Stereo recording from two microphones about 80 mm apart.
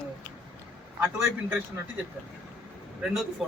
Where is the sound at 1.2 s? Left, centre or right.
Right.